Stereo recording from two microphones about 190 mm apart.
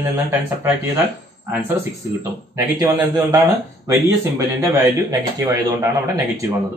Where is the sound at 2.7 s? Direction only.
15° right (ahead or behind).